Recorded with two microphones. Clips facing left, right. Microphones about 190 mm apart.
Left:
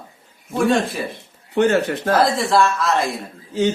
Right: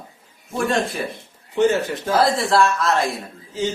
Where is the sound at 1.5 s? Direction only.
60° left (ahead or behind).